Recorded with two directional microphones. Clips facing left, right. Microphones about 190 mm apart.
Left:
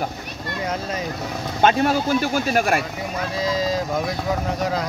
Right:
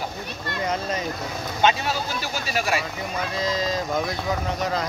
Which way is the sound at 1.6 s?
50° left (ahead or behind).